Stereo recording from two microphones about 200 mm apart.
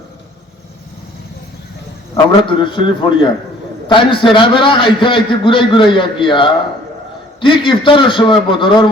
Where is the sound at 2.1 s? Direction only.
25° left (ahead or behind).